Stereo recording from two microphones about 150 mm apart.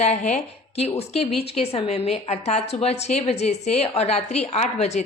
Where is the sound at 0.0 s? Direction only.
50° left (ahead or behind).